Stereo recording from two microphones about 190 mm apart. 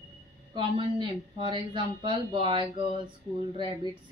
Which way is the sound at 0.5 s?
25° right (ahead or behind).